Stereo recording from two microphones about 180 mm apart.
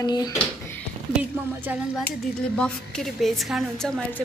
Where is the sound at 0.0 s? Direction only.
20° left (ahead or behind).